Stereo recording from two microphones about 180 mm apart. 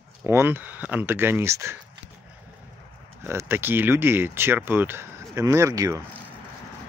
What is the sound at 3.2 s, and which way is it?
Speech, 15° right (ahead or behind).